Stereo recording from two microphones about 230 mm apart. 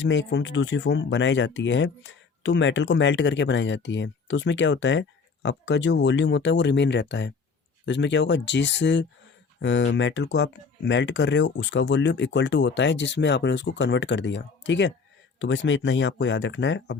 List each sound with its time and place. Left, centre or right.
0.0 s speech: left